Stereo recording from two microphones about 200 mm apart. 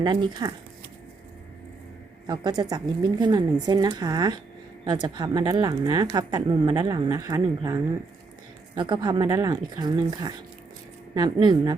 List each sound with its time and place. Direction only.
0.0 s a woman's voice: 20° right (ahead or behind)
2.2 s a woman's voice: 20° right (ahead or behind)